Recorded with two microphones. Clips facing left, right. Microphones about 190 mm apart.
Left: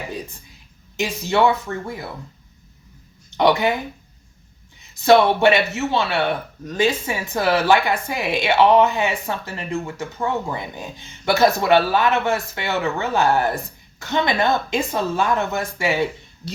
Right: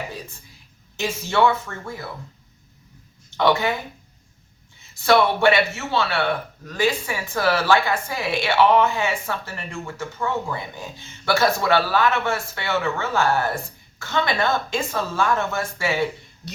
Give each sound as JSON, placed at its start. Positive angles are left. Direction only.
{"t": 0.9, "sound": "speech", "side_deg": 15}
{"t": 3.2, "sound": "speech", "side_deg": 15}
{"t": 4.8, "sound": "speech", "side_deg": 20}